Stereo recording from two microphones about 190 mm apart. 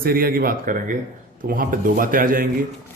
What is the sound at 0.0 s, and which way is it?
Speech, 50° right (ahead or behind).